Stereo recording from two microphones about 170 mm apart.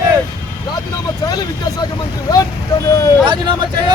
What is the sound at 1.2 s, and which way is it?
Speech, 25° left (ahead or behind).